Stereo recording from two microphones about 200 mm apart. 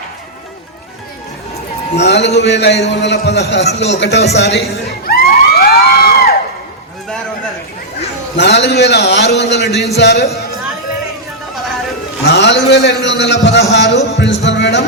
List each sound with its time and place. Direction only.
2.0 s a man's voice: 55° left (ahead or behind)
5.5 s a sound: 50° left (ahead or behind)
8.4 s a man's voice: 60° left (ahead or behind)
12.2 s a man's voice: 60° left (ahead or behind)
14.1 s music: 65° left (ahead or behind)